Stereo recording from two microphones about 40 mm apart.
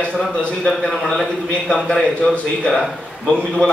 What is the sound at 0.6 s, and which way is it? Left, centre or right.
A man's voice, centre.